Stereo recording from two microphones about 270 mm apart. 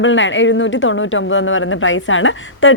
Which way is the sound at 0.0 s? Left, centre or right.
Left.